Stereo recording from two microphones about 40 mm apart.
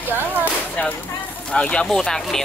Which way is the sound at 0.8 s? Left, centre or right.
Left.